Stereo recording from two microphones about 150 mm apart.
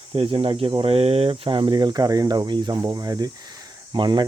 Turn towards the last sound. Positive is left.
turn(degrees=-30)  # may be behind; listen again after turning